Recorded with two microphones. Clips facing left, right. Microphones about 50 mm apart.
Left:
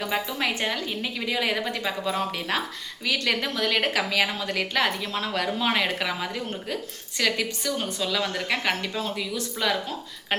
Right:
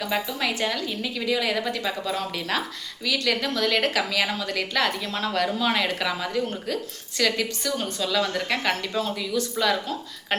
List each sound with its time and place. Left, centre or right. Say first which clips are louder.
0.0 s a woman's voice: even; centre